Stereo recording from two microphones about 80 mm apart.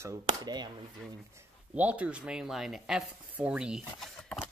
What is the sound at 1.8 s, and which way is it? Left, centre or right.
Speech, centre.